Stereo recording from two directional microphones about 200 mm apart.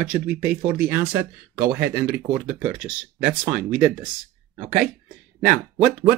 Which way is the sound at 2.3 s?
5° right (ahead or behind).